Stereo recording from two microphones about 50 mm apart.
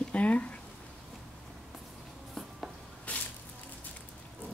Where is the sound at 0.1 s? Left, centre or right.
Left.